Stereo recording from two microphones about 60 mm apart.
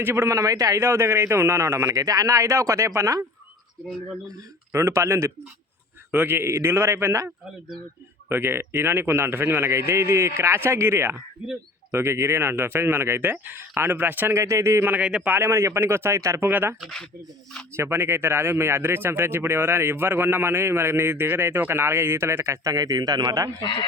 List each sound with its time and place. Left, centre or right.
0.0 s speech: right
0.8 s a man's voice: right
2.0 s speech: right
4.7 s a man's voice: right
6.1 s a man's voice: right
6.4 s a man's voice: right
8.3 s a man's voice: right
14.3 s a man's voice: right
17.7 s speech: right